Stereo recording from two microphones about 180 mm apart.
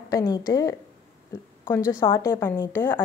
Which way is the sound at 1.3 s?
15° left (ahead or behind).